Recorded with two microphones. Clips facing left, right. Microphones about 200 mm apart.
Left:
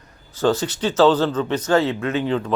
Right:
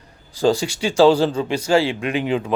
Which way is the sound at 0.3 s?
10° right (ahead or behind).